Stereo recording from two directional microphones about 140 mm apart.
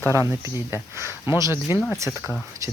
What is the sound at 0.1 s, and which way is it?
Speech, 20° right (ahead or behind).